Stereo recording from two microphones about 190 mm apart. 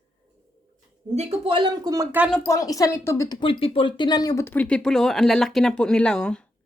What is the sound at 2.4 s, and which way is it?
Speech, 20° left (ahead or behind).